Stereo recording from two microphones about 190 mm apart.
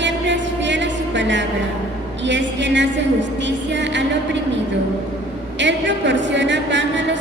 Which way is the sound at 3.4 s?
70° right (ahead or behind).